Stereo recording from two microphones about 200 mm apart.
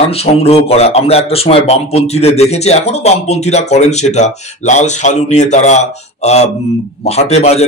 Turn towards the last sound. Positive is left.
turn(degrees=30)  # may be behind; listen again after turning